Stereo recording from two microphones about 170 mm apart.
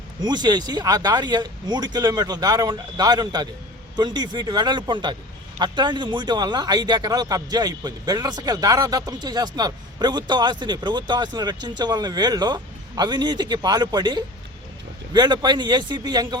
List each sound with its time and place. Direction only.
0.3 s a man's voice: 25° right (ahead or behind)